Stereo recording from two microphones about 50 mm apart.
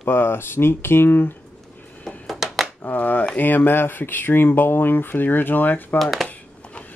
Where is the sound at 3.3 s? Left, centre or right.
Left.